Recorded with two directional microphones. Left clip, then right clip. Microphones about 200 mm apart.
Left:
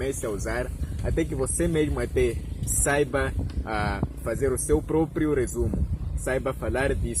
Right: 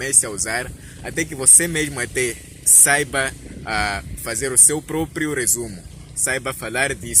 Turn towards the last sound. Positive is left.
turn(degrees=-5)  # may be behind; listen again after turning